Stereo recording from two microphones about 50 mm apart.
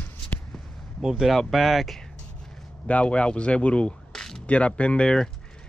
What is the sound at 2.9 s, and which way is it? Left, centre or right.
Speech, left.